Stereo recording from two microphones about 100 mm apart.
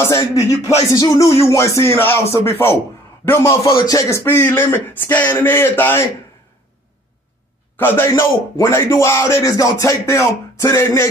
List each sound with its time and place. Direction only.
0.0 s speech: 30° left (ahead or behind)
1.3 s speech: 25° left (ahead or behind)
7.7 s speech: 20° left (ahead or behind)